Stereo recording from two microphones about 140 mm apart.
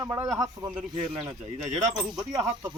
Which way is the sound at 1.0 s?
50° right (ahead or behind).